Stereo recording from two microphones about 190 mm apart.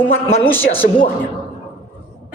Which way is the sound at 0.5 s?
10° left (ahead or behind).